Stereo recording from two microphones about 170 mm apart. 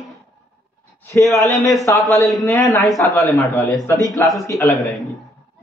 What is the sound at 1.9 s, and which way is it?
Speech, 15° left (ahead or behind).